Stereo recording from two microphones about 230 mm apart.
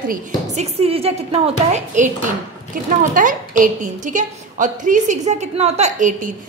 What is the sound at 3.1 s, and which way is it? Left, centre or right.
A woman's voice, right.